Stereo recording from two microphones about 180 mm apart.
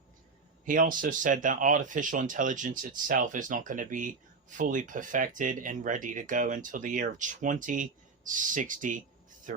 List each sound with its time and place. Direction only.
0.6 s speech: 50° right (ahead or behind)